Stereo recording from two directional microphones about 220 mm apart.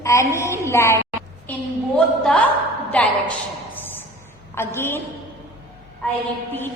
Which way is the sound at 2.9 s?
5° left (ahead or behind).